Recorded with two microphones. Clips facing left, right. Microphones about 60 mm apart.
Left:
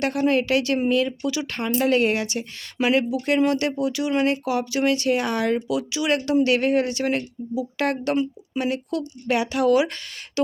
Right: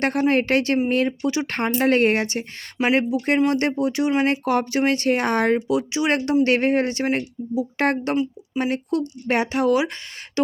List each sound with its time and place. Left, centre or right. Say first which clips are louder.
0.0 s speech: right 1 dB; right
1.5 s speech: right 1 dB; right
4.3 s speech: right 2 dB; right
10.4 s beatboxing: right 1 dB; right